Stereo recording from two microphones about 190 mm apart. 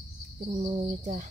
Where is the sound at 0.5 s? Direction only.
40° right (ahead or behind).